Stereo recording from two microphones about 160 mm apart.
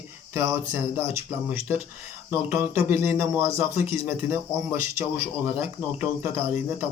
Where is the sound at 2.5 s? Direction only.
15° right (ahead or behind).